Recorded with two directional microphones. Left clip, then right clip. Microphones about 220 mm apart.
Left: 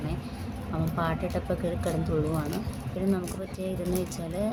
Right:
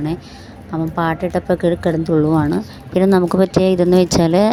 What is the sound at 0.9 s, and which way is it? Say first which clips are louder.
A woman's voice: right 12 dB; 30° right (ahead or behind).